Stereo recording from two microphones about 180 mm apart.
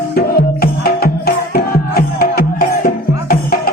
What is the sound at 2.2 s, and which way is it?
Music, 55° left (ahead or behind).